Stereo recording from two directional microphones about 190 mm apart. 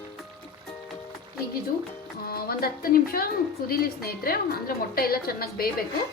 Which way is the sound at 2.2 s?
50° left (ahead or behind).